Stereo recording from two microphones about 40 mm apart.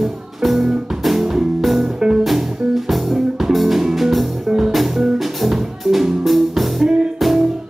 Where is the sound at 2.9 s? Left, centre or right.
Centre.